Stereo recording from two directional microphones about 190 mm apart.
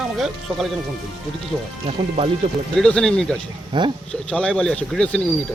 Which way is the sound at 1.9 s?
35° right (ahead or behind).